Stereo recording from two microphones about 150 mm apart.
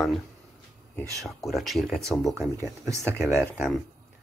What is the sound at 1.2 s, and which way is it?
Speech, centre (ahead or behind).